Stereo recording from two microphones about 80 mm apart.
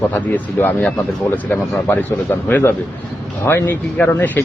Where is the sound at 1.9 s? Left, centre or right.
Left.